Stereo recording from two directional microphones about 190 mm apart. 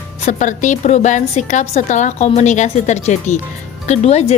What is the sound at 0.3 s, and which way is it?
Speech, 40° left (ahead or behind).